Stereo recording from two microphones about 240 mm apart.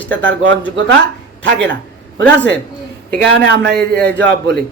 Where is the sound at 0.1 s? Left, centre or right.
Right.